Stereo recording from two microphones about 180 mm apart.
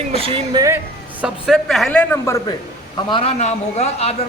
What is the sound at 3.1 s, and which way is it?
A man's voice, 35° left (ahead or behind).